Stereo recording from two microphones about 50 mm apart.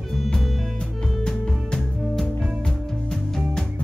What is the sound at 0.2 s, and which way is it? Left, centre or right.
Music, centre.